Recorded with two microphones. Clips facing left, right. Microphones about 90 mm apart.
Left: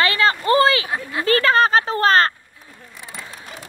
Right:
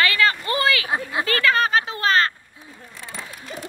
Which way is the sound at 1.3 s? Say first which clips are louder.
Left 5 dB; 35° left (ahead or behind).